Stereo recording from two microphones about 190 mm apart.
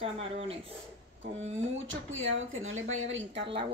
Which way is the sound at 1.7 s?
90° right.